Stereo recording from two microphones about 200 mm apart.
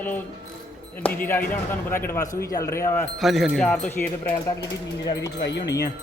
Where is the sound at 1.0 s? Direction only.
10° left (ahead or behind).